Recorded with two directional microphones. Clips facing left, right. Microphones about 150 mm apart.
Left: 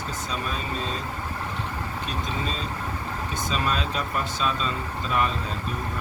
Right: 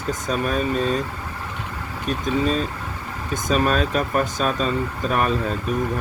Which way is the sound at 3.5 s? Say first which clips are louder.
Right 9 dB; 45° right (ahead or behind).